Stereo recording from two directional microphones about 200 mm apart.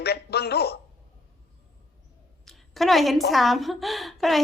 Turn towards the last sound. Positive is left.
turn(degrees=0)  # may be behind; listen again after turning